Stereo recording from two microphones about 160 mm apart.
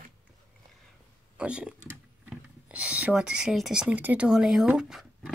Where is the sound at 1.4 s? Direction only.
5° right (ahead or behind).